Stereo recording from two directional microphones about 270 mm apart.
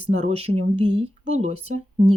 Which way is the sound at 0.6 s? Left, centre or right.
Right.